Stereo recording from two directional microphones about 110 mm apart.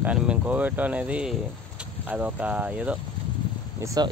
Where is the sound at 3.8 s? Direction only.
35° right (ahead or behind).